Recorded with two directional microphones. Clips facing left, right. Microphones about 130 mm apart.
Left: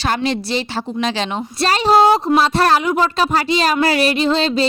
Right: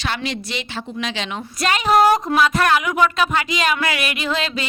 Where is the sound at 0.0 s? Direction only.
35° left (ahead or behind).